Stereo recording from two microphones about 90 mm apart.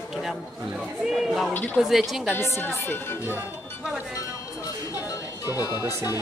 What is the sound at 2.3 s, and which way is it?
Speech, 25° left (ahead or behind).